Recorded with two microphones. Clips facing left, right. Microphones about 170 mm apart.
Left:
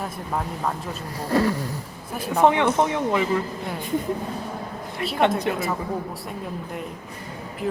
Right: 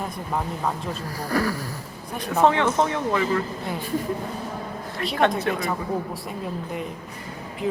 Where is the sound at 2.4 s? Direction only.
15° left (ahead or behind).